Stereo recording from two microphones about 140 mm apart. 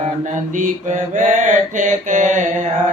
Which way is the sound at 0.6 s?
65° right (ahead or behind).